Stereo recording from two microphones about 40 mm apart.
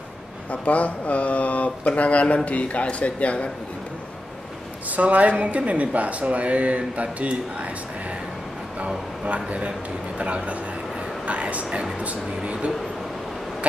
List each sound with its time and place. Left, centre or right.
0.5 s speech: left
4.9 s speech: right
8.7 s a man's voice: right